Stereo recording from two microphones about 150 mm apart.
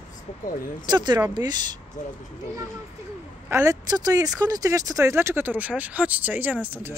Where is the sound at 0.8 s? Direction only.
30° right (ahead or behind).